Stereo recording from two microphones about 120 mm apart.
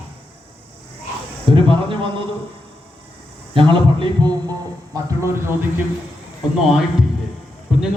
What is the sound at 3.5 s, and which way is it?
Speech, 45° right (ahead or behind).